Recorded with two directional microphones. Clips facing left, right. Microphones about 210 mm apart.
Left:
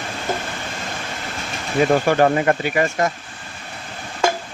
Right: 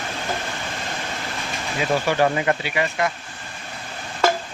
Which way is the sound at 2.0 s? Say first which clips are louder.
Left 4 dB; 50° left (ahead or behind).